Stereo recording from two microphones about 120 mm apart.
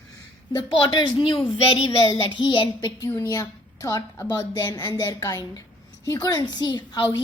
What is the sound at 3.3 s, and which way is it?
A woman's voice, 30° left (ahead or behind).